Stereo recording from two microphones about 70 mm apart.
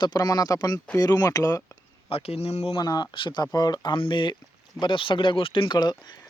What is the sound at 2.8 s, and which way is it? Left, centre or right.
Speech, left.